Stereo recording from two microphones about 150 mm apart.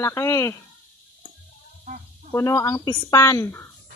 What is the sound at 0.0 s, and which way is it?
Speech, 20° left (ahead or behind).